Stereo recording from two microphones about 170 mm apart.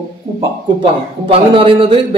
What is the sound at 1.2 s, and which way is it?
Speech, 30° right (ahead or behind).